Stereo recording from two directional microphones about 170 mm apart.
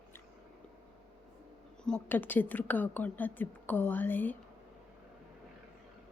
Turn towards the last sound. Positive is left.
turn(degrees=10)  # may be behind; listen again after turning